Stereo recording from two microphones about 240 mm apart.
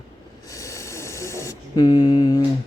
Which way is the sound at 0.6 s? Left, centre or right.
Centre.